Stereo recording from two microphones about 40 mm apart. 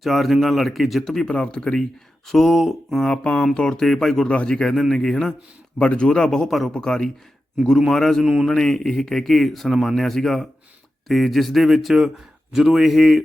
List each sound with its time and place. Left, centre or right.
0.0 s speech: centre
1.3 s speech: left; by 3.0 s centre
3.0 s speech: left
3.7 s speech: centre
4.4 s speech: left
5.8 s speech: left; by 8.2 s centre
8.2 s speech: centre
8.4 s speech: centre